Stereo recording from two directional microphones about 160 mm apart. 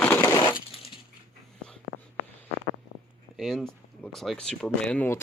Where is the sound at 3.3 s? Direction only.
Centre (ahead or behind).